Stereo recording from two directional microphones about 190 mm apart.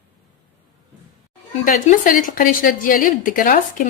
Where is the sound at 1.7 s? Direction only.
45° left (ahead or behind).